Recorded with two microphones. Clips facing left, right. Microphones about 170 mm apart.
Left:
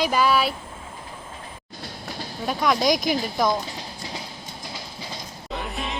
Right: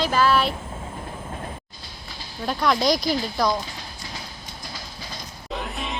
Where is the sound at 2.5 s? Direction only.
Centre (ahead or behind).